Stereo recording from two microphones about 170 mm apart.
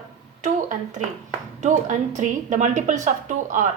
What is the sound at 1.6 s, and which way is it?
A woman's voice, 45° right (ahead or behind).